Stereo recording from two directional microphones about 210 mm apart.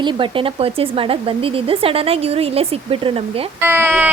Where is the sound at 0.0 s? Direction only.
20° right (ahead or behind).